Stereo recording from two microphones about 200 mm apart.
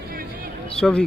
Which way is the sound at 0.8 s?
5° left (ahead or behind).